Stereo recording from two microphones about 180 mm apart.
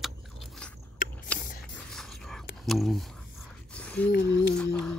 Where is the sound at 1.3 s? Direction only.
10° left (ahead or behind).